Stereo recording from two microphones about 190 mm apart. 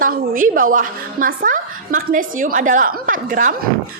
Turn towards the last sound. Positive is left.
turn(degrees=-45)  # may be behind; listen again after turning